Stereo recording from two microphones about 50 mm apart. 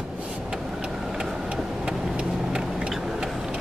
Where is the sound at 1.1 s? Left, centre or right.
Centre.